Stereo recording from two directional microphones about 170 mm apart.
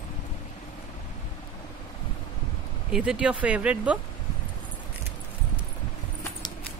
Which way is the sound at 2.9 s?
5° right (ahead or behind).